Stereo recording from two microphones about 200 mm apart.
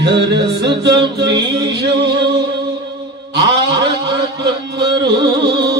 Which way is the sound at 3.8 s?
55° right (ahead or behind).